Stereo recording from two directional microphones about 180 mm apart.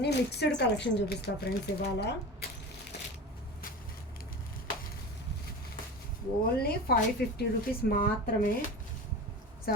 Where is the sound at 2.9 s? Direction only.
65° left (ahead or behind).